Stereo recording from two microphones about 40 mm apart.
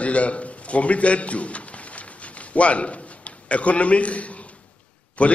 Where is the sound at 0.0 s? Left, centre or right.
Left.